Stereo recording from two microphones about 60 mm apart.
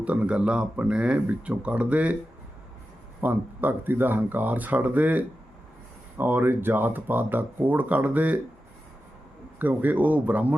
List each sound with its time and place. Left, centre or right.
0.0 s speech: right
3.2 s speech: right
9.6 s speech: right